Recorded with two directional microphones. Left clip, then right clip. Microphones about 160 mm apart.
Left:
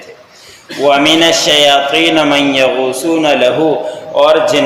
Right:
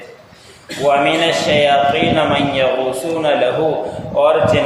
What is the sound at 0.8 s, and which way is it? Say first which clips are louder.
Speech: left 5 dB; 35° left (ahead or behind).